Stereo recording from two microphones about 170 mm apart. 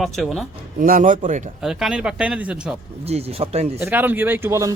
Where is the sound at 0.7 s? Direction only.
55° right (ahead or behind).